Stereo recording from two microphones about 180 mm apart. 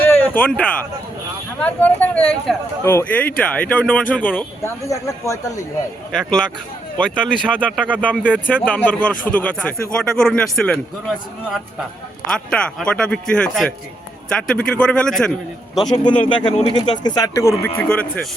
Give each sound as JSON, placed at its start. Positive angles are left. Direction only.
{"t": 0.0, "sound": "a sound", "side_deg": 10}
{"t": 1.5, "sound": "speech", "side_deg": 10}
{"t": 6.9, "sound": "speech", "side_deg": 5}
{"t": 7.8, "sound": "speech", "side_deg": -10}
{"t": 8.5, "sound": "speech", "side_deg": 10}
{"t": 12.3, "sound": "speech", "side_deg": 5}
{"t": 16.0, "sound": "speech", "side_deg": 25}